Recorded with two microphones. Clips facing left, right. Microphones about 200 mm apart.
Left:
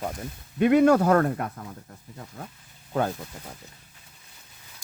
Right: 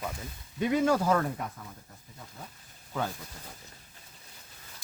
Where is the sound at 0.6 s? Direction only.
65° left (ahead or behind).